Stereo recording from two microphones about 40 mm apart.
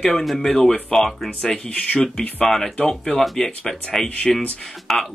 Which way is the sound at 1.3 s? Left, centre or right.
Left.